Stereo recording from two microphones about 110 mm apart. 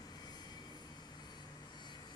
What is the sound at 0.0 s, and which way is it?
Vehicle, 40° left (ahead or behind).